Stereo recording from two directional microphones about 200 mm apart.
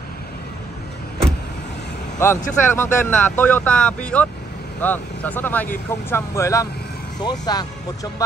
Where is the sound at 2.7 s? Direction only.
10° left (ahead or behind).